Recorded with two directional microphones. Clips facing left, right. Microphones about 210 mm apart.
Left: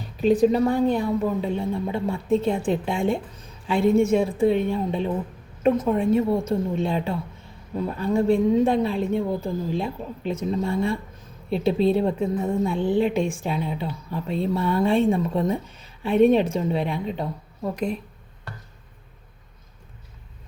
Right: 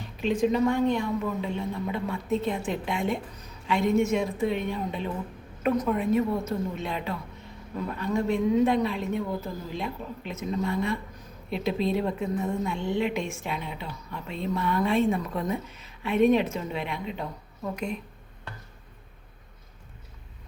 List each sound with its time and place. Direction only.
0.2 s a woman's voice: 40° left (ahead or behind)